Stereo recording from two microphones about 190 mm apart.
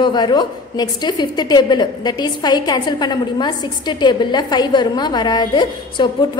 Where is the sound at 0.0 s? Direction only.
20° left (ahead or behind).